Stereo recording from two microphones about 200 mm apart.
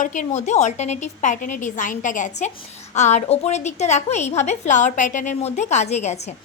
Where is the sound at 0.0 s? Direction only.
40° left (ahead or behind).